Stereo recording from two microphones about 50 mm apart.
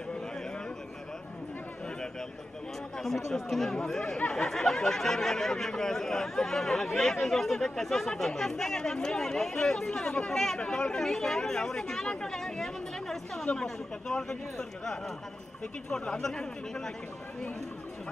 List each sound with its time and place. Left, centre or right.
3.0 s speech: centre